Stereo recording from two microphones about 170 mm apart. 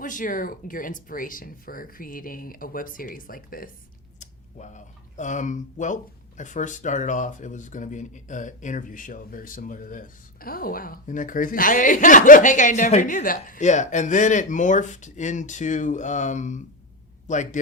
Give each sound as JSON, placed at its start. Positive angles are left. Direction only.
{"t": 0.0, "sound": "speech", "side_deg": 50}
{"t": 4.2, "sound": "speech", "side_deg": 45}